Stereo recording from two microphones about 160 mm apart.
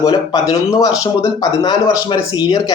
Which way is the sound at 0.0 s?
25° left (ahead or behind).